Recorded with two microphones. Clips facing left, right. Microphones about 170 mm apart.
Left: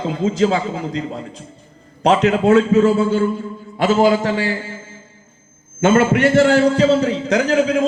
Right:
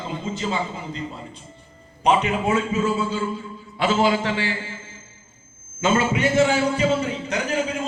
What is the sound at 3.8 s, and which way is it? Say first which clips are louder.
A man's voice: left 6 dB; 45° left (ahead or behind).